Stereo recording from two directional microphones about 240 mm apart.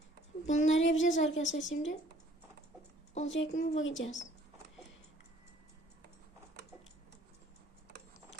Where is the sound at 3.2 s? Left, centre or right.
Left.